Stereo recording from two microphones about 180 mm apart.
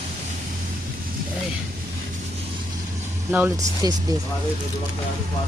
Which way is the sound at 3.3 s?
10° right (ahead or behind).